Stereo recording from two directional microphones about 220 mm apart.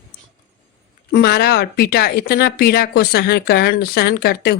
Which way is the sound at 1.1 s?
45° left (ahead or behind).